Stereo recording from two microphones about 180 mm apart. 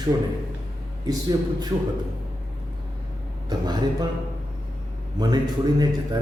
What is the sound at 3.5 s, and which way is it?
Speech, 25° right (ahead or behind).